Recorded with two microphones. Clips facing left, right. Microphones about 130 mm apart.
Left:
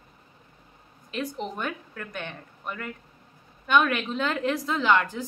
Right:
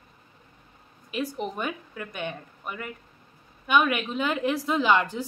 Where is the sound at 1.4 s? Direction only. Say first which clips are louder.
Right 1 dB; 10° right (ahead or behind).